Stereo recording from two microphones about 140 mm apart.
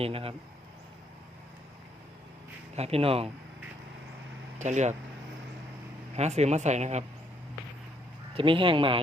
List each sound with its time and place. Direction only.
0.0 s speech: 40° right (ahead or behind)
2.7 s speech: 45° right (ahead or behind)
4.5 s speech: 60° right (ahead or behind)
6.1 s speech: 50° right (ahead or behind)
8.4 s speech: 35° right (ahead or behind)